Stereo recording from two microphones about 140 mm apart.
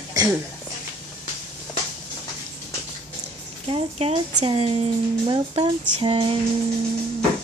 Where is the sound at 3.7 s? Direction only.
45° right (ahead or behind).